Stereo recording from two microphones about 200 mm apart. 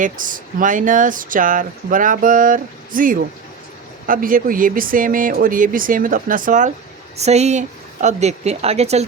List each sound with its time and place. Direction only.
0.0 s speech: 40° right (ahead or behind)